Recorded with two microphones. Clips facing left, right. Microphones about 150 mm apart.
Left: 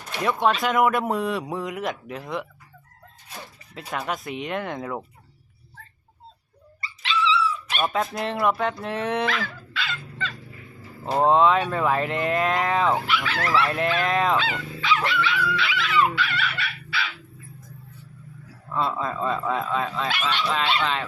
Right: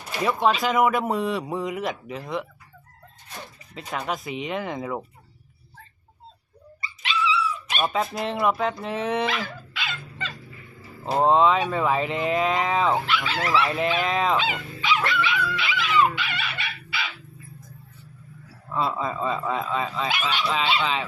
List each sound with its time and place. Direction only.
0.0 s speech: 5° right (ahead or behind)
6.8 s dog: 15° right (ahead or behind)
7.8 s speech: centre (ahead or behind)
9.2 s dog: 15° right (ahead or behind)
11.0 s speech: centre (ahead or behind)
13.2 s speech: 20° right (ahead or behind)
13.5 s speech: centre (ahead or behind)
14.3 s dog: 15° right (ahead or behind)
18.7 s speech: 5° right (ahead or behind)
20.1 s speech: 10° right (ahead or behind)